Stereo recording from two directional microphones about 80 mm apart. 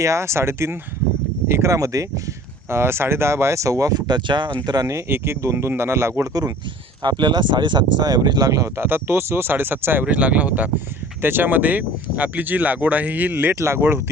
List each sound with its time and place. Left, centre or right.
0.0 s speech: right
2.6 s speech: right
4.6 s speech: right
4.9 s speech: right
7.0 s speech: right